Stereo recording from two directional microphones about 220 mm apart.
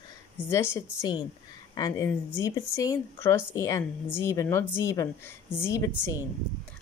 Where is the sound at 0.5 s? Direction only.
10° left (ahead or behind).